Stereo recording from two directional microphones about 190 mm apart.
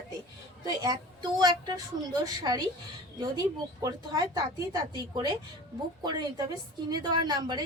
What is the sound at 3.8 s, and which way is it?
A woman's voice, 20° right (ahead or behind).